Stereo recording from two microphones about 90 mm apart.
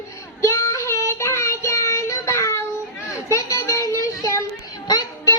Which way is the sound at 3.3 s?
35° left (ahead or behind).